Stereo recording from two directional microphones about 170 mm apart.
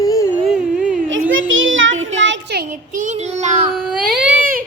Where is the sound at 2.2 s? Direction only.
80° right; by 3.7 s 40° right (ahead or behind).